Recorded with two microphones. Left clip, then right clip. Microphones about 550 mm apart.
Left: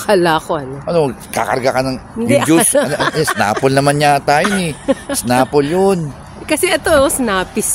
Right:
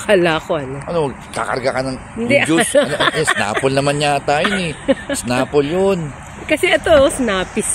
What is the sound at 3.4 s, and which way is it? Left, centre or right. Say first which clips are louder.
Speech: left 3 dB; left.